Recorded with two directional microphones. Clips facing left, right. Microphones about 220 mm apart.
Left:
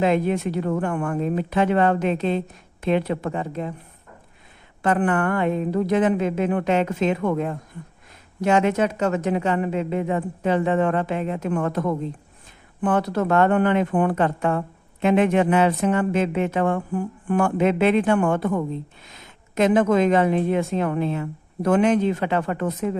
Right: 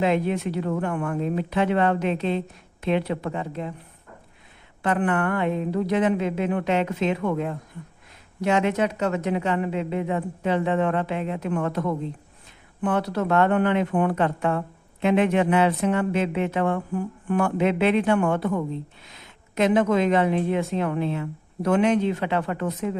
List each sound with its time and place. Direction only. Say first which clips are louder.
0.0 s a woman's voice: left 2 dB; 45° left (ahead or behind)
4.8 s a woman's voice: left 2 dB; 45° left (ahead or behind)